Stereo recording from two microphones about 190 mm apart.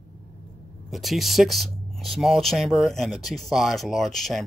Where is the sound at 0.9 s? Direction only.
Centre (ahead or behind).